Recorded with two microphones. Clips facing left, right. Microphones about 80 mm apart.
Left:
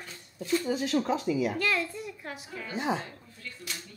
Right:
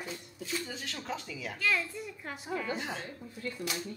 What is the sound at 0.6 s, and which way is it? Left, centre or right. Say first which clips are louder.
Speech: left 12 dB; centre.